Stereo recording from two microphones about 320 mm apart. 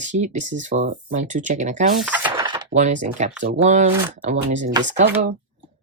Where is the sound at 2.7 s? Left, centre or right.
Right.